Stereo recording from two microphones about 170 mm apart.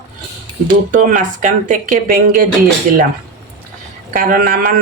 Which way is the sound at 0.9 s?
55° right (ahead or behind).